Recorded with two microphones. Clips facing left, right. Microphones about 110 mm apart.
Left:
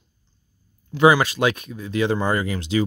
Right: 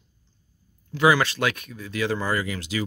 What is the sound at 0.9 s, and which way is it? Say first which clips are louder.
Speech: left 4 dB; 20° left (ahead or behind).